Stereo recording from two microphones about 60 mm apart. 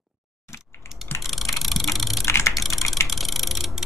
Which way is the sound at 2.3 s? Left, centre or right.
Left.